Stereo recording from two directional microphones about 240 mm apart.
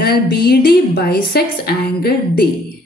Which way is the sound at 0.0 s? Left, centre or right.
Left.